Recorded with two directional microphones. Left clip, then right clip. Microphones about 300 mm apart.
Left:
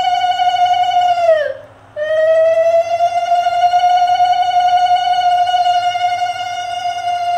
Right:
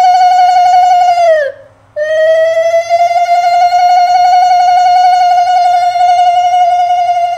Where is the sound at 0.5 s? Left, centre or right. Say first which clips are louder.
Right 7 dB; right.